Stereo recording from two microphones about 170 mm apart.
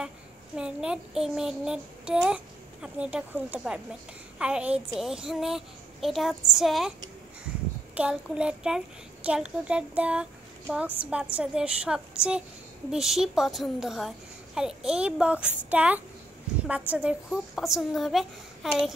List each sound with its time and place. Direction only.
0.6 s a child's voice: 5° right (ahead or behind)
7.9 s a child's voice: 5° right (ahead or behind)